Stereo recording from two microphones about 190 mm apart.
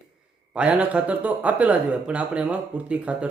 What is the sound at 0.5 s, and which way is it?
Speech, 5° right (ahead or behind).